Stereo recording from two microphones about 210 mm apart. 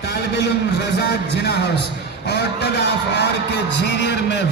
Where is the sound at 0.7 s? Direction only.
50° left (ahead or behind).